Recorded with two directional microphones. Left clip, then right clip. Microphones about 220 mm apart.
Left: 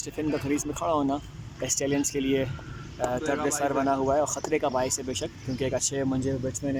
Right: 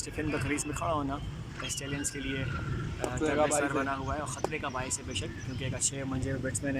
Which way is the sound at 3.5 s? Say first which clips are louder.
Left 4 dB; 25° left (ahead or behind).